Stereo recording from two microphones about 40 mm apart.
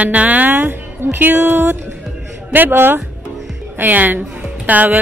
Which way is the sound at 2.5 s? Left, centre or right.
Right.